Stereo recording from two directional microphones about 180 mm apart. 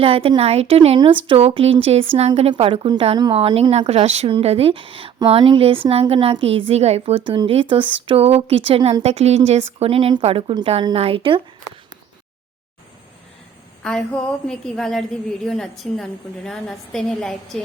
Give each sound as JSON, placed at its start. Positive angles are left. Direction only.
{"t": 0.0, "sound": "speech", "side_deg": -30}
{"t": 13.8, "sound": "a woman's voice", "side_deg": 5}